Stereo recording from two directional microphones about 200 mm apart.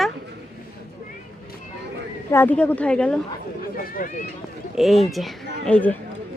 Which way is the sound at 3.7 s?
45° left (ahead or behind).